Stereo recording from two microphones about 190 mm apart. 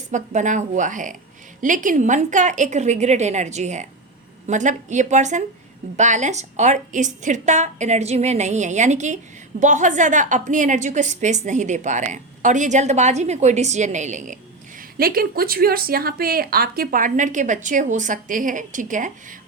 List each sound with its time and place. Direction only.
0.1 s a woman's voice: 40° right (ahead or behind)
14.8 s a woman's voice: 50° right (ahead or behind)